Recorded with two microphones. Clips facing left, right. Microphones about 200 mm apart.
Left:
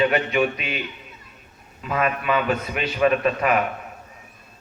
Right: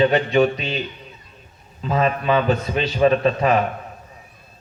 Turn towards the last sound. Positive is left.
turn(degrees=-30)  # may be behind; listen again after turning